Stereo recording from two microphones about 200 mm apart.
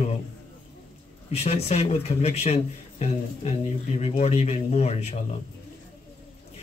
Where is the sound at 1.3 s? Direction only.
30° left (ahead or behind).